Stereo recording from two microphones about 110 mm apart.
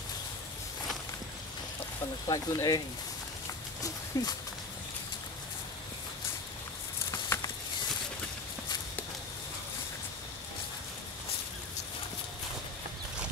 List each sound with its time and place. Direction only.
2.2 s speech: 35° left (ahead or behind)
4.1 s speech: 35° left (ahead or behind)
7.1 s a sound: 25° left (ahead or behind)